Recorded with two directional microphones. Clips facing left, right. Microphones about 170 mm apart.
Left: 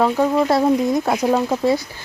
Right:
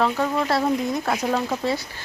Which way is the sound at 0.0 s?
20° left (ahead or behind).